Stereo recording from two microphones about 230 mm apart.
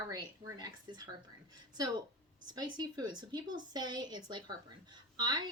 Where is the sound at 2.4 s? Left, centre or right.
Centre.